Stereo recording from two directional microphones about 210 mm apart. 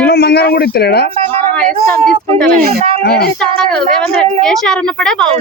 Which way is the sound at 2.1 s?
5° left (ahead or behind).